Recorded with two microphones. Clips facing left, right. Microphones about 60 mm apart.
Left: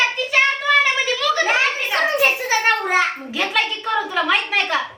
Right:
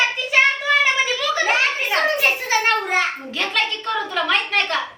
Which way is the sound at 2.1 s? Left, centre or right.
Centre.